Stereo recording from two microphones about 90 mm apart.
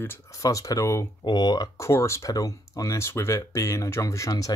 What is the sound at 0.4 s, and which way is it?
Speech, 40° left (ahead or behind).